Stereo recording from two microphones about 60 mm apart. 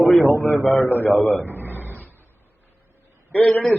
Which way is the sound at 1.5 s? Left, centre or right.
Right.